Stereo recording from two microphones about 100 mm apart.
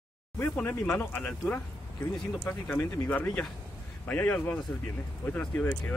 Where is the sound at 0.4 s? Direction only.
15° left (ahead or behind).